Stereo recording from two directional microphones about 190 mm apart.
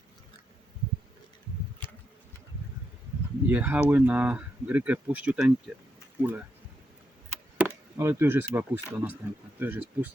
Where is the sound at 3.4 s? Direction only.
10° right (ahead or behind).